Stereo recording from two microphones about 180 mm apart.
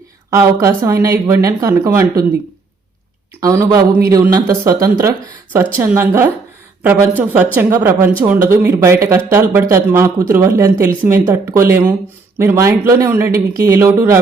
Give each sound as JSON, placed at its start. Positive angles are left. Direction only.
{"t": 0.3, "sound": "speech", "side_deg": -15}
{"t": 3.4, "sound": "speech", "side_deg": -20}